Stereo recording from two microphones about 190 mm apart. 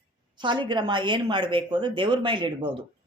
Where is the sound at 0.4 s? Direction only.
25° right (ahead or behind).